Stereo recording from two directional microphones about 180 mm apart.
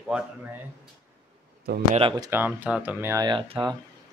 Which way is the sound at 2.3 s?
10° right (ahead or behind).